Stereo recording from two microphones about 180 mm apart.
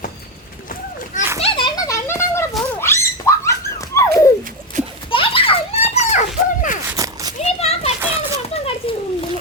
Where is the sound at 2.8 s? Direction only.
15° left (ahead or behind).